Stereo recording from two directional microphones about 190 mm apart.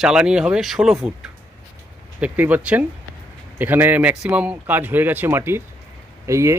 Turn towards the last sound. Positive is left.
turn(degrees=-15)  # may be behind; listen again after turning